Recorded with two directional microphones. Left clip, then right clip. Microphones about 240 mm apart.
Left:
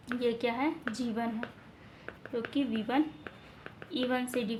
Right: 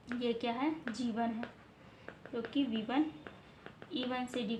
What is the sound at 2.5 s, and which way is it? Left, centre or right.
A woman's voice, left.